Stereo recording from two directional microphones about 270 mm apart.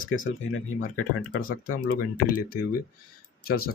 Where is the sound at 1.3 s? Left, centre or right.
Left.